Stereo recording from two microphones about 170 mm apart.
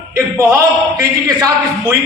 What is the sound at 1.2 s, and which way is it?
Speech, 20° right (ahead or behind).